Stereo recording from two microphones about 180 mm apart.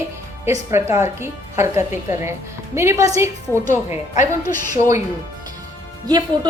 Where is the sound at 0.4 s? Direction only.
15° right (ahead or behind).